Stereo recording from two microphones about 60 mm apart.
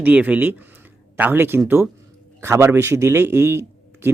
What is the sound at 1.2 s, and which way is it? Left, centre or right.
A man's voice, right.